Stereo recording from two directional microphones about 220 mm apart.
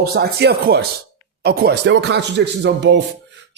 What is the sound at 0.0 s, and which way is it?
A man's voice, 45° right (ahead or behind).